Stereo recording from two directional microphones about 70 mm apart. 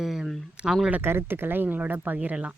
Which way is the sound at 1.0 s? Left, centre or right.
Right.